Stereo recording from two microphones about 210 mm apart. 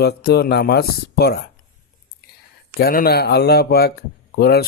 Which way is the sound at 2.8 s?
45° left (ahead or behind).